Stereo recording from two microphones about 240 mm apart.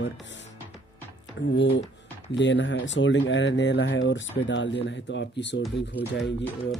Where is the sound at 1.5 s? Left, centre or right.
Left.